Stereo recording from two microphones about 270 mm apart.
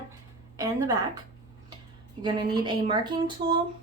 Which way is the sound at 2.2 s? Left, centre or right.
Centre.